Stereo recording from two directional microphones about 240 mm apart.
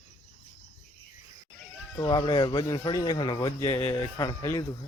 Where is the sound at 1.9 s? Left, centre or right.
Centre.